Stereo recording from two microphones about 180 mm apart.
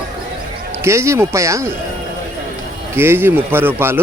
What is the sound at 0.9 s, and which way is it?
Speech, 15° right (ahead or behind).